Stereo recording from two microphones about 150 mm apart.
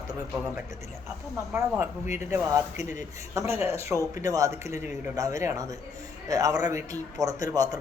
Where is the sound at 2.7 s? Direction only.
55° left (ahead or behind).